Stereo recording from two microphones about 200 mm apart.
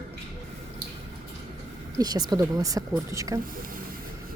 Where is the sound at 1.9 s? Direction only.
20° right (ahead or behind).